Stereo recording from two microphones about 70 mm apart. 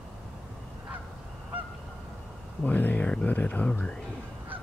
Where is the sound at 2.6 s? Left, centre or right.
Left.